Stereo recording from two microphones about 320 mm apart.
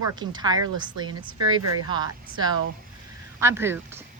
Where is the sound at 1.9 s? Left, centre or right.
Centre.